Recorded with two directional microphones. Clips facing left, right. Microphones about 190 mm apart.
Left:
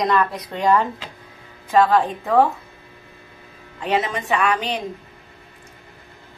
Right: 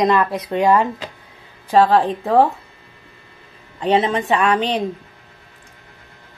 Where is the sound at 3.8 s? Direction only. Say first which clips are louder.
Right 5 dB; 30° right (ahead or behind).